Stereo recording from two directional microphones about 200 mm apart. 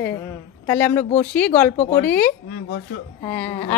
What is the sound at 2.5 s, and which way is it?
Speech, 50° left (ahead or behind).